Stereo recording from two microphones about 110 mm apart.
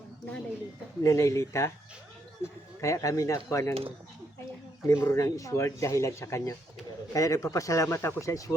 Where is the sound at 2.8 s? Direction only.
30° left (ahead or behind).